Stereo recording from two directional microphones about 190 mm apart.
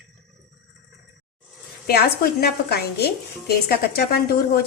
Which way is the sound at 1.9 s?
55° left (ahead or behind).